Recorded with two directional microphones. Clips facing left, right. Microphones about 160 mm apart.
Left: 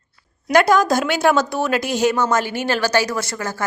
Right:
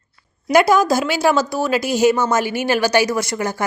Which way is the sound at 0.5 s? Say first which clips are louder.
Right 1 dB; 5° right (ahead or behind).